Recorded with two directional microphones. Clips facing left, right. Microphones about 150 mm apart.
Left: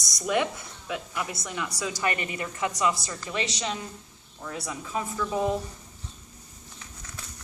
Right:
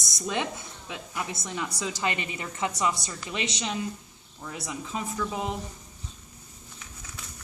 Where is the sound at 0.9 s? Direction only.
25° right (ahead or behind).